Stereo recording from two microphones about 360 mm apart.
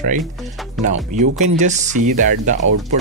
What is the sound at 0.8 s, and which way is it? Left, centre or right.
Speech, centre.